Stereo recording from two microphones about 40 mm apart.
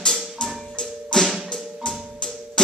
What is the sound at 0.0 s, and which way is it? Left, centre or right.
Music, centre.